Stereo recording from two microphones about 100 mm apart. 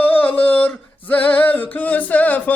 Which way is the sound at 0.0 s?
20° left (ahead or behind).